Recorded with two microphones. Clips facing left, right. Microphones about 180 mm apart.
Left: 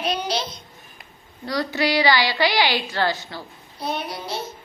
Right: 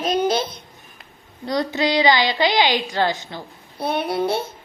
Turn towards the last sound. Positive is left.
turn(degrees=-60)  # may be behind; listen again after turning